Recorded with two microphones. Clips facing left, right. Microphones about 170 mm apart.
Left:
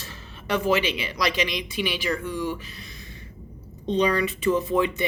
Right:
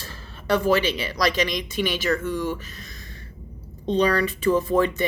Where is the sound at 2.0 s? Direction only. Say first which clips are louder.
Right 4 dB; 15° left (ahead or behind).